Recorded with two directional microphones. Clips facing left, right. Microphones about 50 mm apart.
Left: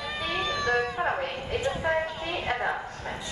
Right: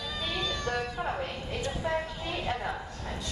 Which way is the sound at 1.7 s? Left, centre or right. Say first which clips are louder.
Left 4 dB; left.